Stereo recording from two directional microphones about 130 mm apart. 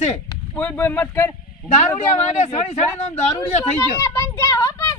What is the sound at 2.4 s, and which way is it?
A man's voice, 55° left (ahead or behind).